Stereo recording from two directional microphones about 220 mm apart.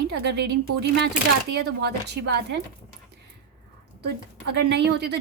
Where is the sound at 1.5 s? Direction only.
50° right (ahead or behind).